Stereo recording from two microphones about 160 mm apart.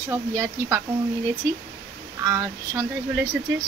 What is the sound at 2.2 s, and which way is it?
Speech, 20° right (ahead or behind).